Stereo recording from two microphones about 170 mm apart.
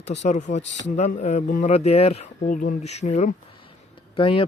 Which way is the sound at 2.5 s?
50° left (ahead or behind).